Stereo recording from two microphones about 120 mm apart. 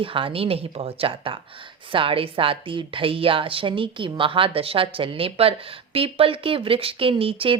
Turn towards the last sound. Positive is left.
turn(degrees=-50)  # may be behind; listen again after turning